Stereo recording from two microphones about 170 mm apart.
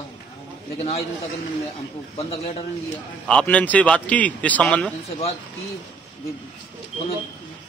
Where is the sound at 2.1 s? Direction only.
35° left (ahead or behind).